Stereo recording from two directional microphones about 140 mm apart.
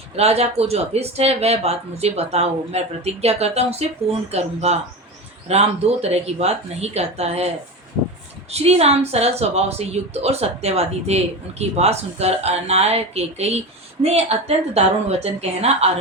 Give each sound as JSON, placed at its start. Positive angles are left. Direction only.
{"t": 0.2, "sound": "a woman's voice", "side_deg": -45}